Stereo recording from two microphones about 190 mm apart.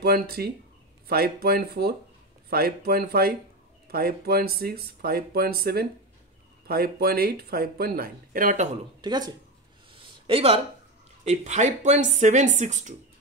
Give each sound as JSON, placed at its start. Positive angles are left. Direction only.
{"t": 0.0, "sound": "speech", "side_deg": -55}
{"t": 9.0, "sound": "speech", "side_deg": -20}
{"t": 9.9, "sound": "a sound", "side_deg": -30}
{"t": 11.2, "sound": "speech", "side_deg": -35}